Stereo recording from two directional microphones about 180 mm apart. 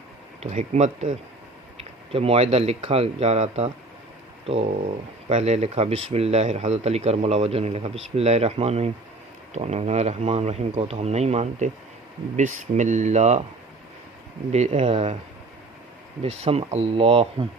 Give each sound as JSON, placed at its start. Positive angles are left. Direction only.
{"t": 0.3, "sound": "speech", "side_deg": -40}
{"t": 14.5, "sound": "speech", "side_deg": -40}
{"t": 16.2, "sound": "speech", "side_deg": -35}